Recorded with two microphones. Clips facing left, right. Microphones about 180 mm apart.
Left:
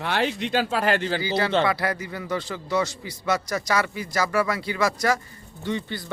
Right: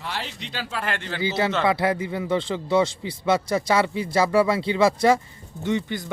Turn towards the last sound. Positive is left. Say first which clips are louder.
# right 4 dB
turn(degrees=-20)  # may be behind; listen again after turning